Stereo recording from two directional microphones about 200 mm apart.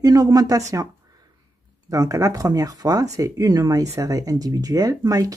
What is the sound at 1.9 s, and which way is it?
Speech, 15° right (ahead or behind).